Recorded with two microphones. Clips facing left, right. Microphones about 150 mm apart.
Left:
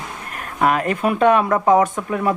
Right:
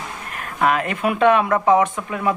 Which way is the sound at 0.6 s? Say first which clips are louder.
Left 1 dB; 40° left (ahead or behind).